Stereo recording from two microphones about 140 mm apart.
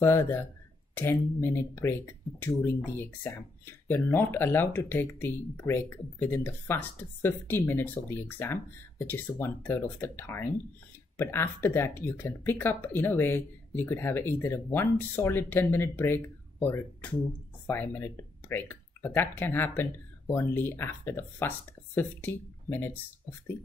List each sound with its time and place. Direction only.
0.0 s speech: 20° left (ahead or behind)